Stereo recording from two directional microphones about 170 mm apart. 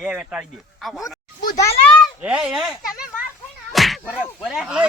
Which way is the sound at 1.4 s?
20° left (ahead or behind).